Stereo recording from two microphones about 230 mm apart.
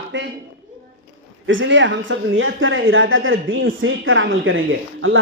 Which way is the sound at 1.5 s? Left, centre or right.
Right.